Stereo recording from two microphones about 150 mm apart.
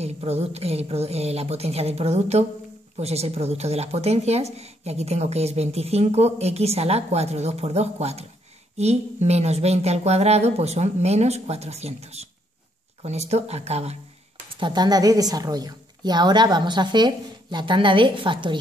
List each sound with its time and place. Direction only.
0.0 s speech: 45° right (ahead or behind)
14.6 s a woman's voice: 30° right (ahead or behind)